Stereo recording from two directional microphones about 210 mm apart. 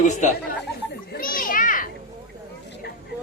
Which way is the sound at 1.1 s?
45° left (ahead or behind).